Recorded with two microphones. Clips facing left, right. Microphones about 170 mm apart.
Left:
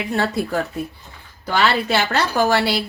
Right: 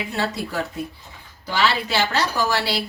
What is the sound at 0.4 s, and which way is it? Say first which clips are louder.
Speech: left 5 dB; 50° left (ahead or behind).